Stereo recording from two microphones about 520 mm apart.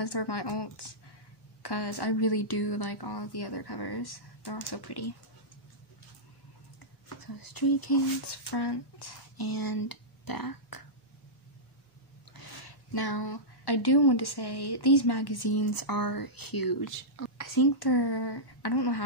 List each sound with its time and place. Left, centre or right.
0.0 s speech: left
7.2 s speech: left
12.4 s speech: left